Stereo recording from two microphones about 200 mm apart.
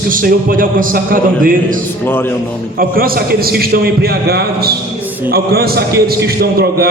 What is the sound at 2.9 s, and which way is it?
A man's voice, 45° right (ahead or behind).